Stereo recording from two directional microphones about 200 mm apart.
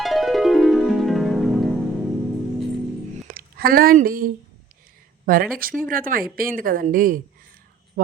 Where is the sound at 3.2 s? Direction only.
45° right (ahead or behind).